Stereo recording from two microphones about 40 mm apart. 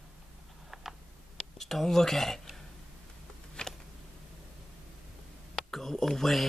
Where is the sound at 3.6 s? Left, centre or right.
Left.